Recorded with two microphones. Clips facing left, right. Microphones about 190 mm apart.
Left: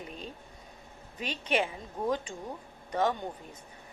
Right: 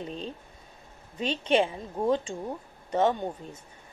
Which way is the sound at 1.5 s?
25° right (ahead or behind).